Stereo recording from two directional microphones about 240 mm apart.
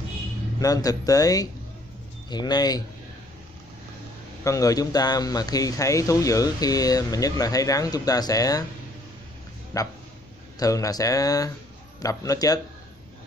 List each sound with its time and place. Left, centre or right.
0.6 s speech: centre
4.5 s speech: centre
9.7 s speech: centre